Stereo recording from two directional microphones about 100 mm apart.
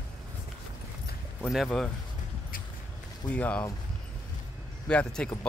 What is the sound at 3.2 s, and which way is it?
Speech, 15° left (ahead or behind).